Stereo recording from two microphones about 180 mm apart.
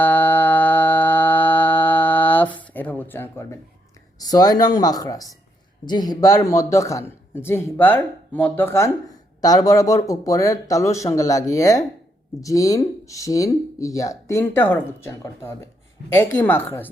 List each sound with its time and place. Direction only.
0.0 s music: 10° left (ahead or behind)
4.2 s a man's voice: 20° left (ahead or behind)